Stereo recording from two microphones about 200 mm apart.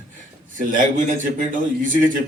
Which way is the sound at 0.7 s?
40° right (ahead or behind).